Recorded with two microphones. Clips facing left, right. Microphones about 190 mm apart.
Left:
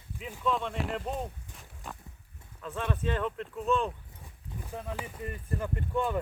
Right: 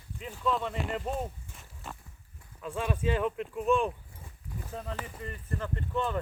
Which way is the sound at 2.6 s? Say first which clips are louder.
Right 1 dB; 10° right (ahead or behind).